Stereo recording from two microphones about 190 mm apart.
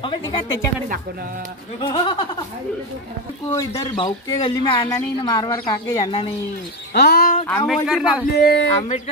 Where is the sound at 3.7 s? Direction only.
25° left (ahead or behind).